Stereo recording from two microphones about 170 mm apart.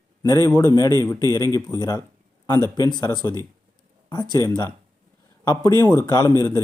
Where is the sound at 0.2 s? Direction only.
20° left (ahead or behind).